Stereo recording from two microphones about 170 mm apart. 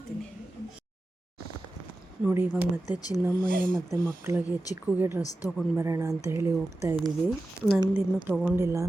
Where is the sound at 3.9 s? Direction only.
15° right (ahead or behind).